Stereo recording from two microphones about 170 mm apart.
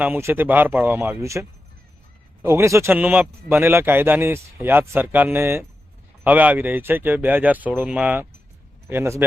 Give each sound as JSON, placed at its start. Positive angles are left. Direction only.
{"t": 0.0, "sound": "a man's voice", "side_deg": -15}